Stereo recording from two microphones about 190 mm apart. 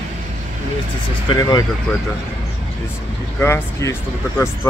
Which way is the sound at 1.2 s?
25° left (ahead or behind).